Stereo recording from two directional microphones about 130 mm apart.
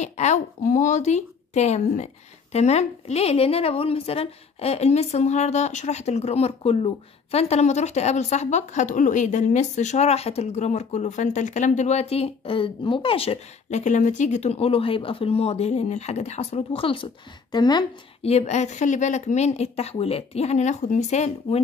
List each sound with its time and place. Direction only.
0.0 s a woman's voice: 60° left (ahead or behind); by 17.8 s 35° left (ahead or behind)
18.2 s a woman's voice: 55° left (ahead or behind)